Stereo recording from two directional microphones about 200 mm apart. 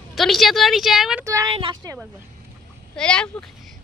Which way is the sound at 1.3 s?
15° right (ahead or behind).